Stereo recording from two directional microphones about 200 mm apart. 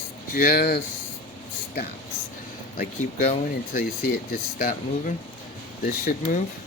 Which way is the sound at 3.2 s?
50° left (ahead or behind).